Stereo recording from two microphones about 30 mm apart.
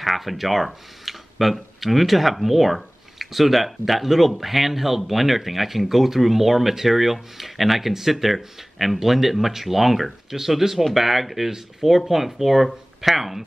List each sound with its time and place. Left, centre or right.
0.0 s speech: centre
10.8 s speech: centre